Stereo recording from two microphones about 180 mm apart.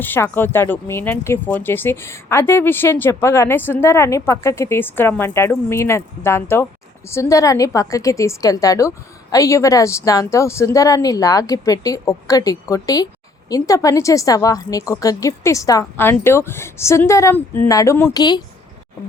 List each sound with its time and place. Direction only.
0.0 s a woman's voice: 10° left (ahead or behind)